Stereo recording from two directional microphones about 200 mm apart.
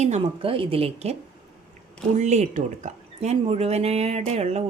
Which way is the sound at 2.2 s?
35° right (ahead or behind).